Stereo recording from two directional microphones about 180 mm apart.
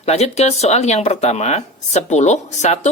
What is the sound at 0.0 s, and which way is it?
Speech, 35° left (ahead or behind).